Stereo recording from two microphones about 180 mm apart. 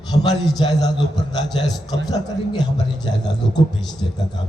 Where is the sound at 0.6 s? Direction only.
20° left (ahead or behind).